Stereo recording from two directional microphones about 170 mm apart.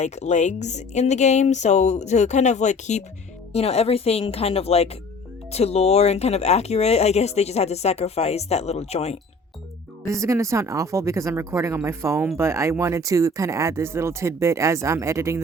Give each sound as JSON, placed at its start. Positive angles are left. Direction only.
{"t": 0.0, "sound": "speech", "side_deg": 40}
{"t": 10.1, "sound": "speech", "side_deg": -20}